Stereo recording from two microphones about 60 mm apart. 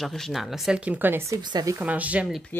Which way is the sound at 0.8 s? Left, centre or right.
Right.